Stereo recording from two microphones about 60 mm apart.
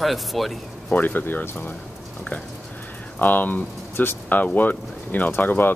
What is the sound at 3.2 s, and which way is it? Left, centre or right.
Speech, left.